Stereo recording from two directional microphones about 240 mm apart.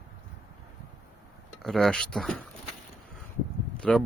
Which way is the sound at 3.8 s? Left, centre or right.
Centre.